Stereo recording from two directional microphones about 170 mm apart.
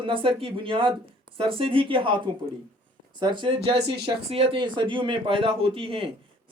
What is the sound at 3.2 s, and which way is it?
Speech, 25° right (ahead or behind).